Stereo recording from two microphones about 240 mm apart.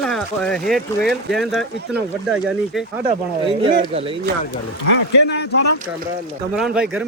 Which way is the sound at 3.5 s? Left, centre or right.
Right.